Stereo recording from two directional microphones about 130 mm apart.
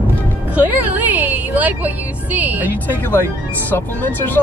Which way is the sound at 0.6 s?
15° right (ahead or behind).